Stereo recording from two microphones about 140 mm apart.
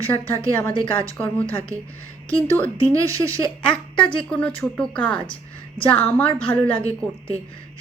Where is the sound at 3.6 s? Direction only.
10° left (ahead or behind).